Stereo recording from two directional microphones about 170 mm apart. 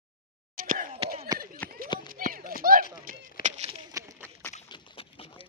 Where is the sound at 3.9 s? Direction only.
15° right (ahead or behind).